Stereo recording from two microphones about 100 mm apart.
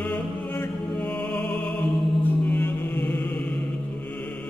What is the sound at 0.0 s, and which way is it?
Music, 20° left (ahead or behind).